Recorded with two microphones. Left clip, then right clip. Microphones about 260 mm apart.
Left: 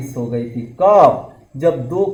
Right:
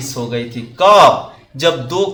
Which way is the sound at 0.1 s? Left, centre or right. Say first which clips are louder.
Right 1 dB; centre.